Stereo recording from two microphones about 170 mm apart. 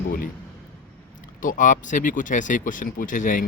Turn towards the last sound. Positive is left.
turn(degrees=50)  # may be behind; listen again after turning